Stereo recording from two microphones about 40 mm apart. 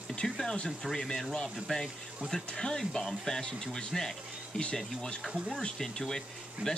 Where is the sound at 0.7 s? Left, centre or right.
Centre.